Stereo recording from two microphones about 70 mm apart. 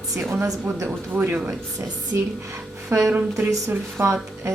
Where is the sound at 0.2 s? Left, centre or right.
Right.